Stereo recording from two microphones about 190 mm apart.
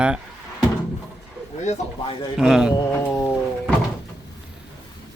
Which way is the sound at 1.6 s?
35° left (ahead or behind).